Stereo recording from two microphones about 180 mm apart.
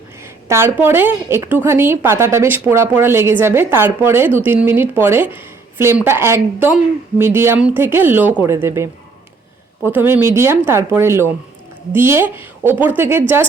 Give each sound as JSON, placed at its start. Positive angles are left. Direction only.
{"t": 0.4, "sound": "a woman's voice", "side_deg": -15}